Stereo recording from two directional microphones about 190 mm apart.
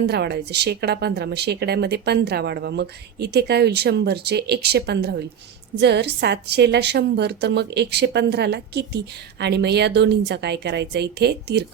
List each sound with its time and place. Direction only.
0.0 s a woman's voice: 60° right (ahead or behind)